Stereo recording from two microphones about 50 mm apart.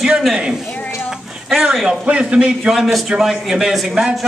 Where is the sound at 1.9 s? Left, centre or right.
Right.